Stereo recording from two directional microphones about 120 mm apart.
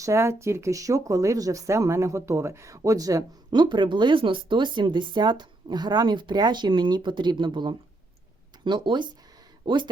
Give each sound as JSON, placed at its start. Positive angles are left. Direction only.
{"t": 0.0, "sound": "speech", "side_deg": -25}